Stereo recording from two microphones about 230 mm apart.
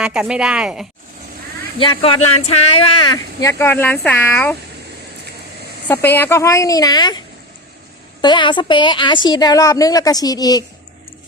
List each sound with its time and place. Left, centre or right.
0.0 s speech: centre
1.8 s speech: left
3.6 s a woman's voice: centre
5.9 s a woman's voice: centre
8.2 s a woman's voice: centre